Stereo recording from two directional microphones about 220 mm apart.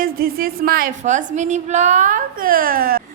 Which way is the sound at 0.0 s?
40° right (ahead or behind).